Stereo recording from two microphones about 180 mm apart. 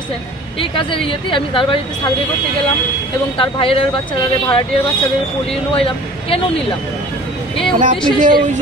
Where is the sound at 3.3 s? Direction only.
30° left (ahead or behind).